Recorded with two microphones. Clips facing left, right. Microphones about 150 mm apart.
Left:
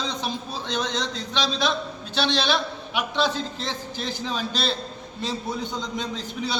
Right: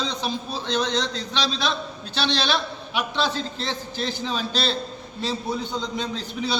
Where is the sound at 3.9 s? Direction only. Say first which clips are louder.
Right 3 dB; 10° left (ahead or behind).